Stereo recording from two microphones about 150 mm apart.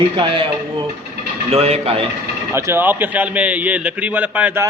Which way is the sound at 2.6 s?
15° right (ahead or behind).